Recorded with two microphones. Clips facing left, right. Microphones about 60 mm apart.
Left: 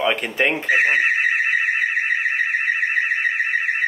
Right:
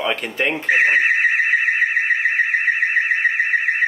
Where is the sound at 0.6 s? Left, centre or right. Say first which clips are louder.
Right 4 dB; right.